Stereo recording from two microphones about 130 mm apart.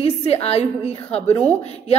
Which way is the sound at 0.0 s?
50° left (ahead or behind).